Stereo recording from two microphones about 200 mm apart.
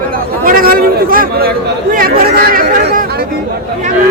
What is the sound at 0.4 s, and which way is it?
Chatter, 45° right (ahead or behind).